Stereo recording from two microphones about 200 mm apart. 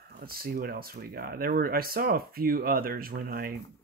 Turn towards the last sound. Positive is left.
turn(degrees=-50)  # may be behind; listen again after turning